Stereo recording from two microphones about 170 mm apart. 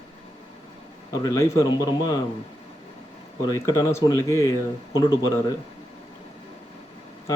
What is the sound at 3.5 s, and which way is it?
Speech, 20° left (ahead or behind).